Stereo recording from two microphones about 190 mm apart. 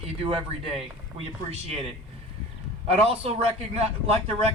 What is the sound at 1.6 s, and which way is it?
Speech, 30° right (ahead or behind).